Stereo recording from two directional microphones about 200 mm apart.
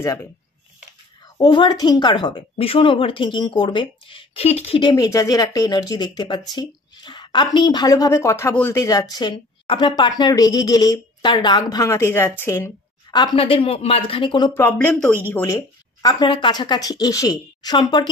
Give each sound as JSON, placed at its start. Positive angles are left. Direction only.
{"t": 0.0, "sound": "speech", "side_deg": 15}
{"t": 1.4, "sound": "a woman's voice", "side_deg": 20}
{"t": 14.5, "sound": "speech", "side_deg": 10}
{"t": 16.0, "sound": "a woman's voice", "side_deg": 20}